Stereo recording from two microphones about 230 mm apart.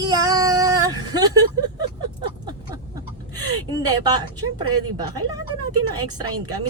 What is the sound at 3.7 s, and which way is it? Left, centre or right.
Speech, centre.